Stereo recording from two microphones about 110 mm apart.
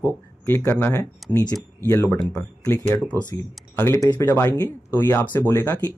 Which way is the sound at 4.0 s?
30° left (ahead or behind).